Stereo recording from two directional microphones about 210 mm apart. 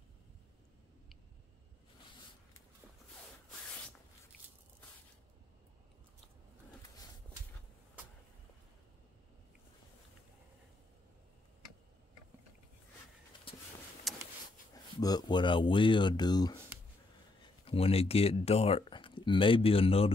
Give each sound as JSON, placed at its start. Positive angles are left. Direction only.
{"t": 14.1, "sound": "a sound", "side_deg": 0}
{"t": 14.7, "sound": "speech", "side_deg": 15}
{"t": 17.6, "sound": "speech", "side_deg": 30}